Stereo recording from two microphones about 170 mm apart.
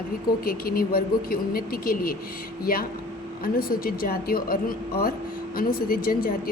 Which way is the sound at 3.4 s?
60° left (ahead or behind).